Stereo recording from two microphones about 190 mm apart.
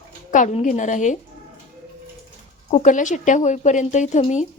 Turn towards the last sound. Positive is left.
turn(degrees=35)  # may be behind; listen again after turning